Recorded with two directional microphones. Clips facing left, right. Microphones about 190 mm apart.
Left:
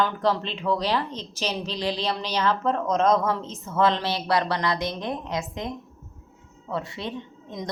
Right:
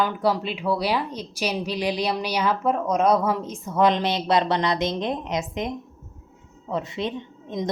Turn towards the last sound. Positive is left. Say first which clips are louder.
# right 6 dB
turn(degrees=-20)  # may be behind; listen again after turning